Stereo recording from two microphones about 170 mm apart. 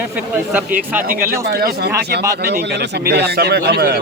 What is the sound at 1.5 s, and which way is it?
A man's voice, 70° right (ahead or behind).